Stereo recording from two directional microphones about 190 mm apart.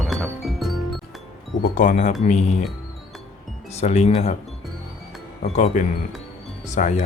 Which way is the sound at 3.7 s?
35° left (ahead or behind).